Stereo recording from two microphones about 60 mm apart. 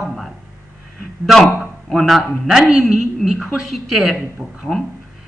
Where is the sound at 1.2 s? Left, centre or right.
Centre.